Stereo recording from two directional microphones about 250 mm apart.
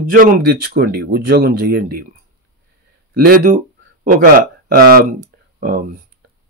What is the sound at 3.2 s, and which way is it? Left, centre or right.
Speech, right.